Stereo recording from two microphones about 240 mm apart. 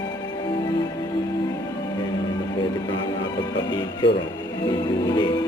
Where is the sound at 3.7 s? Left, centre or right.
Centre.